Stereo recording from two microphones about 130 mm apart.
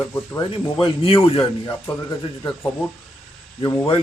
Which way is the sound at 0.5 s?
40° left (ahead or behind).